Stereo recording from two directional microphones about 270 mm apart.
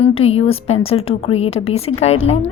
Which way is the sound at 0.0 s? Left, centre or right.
Left.